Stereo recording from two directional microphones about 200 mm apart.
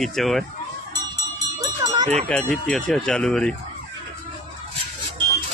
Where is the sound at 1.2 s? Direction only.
15° right (ahead or behind).